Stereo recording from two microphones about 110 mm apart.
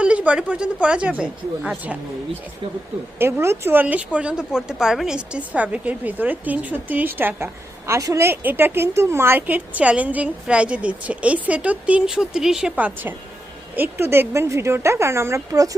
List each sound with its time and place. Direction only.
0.0 s speech: 10° right (ahead or behind)
3.2 s speech: 20° right (ahead or behind); by 12.7 s 5° right (ahead or behind)
12.7 s speech: 15° right (ahead or behind)